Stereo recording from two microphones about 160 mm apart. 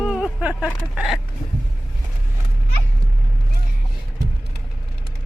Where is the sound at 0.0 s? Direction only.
5° right (ahead or behind).